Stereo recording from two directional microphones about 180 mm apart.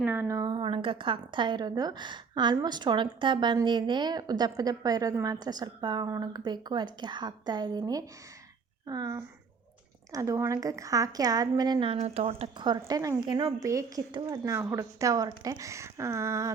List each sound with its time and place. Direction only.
0.0 s a woman's voice: 10° right (ahead or behind)